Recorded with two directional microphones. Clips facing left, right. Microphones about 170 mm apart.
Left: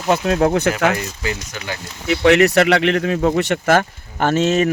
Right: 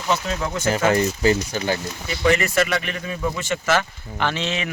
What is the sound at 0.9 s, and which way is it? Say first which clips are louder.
Speech: right 7 dB; 35° right (ahead or behind).